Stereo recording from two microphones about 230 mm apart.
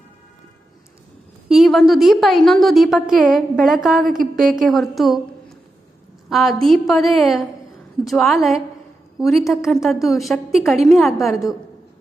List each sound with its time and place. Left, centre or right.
1.5 s a woman's voice: centre
6.3 s a woman's voice: centre